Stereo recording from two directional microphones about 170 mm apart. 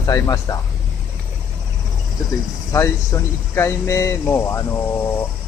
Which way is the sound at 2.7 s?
15° left (ahead or behind).